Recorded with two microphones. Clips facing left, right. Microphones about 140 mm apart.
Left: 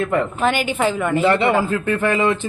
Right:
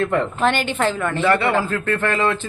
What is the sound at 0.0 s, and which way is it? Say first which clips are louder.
A woman's voice: even; 5° left (ahead or behind).